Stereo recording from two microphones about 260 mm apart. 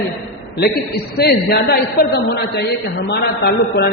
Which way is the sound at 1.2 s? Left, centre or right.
Left.